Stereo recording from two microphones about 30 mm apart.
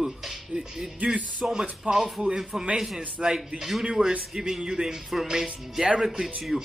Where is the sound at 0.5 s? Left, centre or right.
Centre.